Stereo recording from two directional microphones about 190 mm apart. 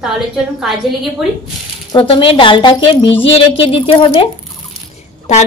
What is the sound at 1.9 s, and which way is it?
A woman's voice, 25° left (ahead or behind).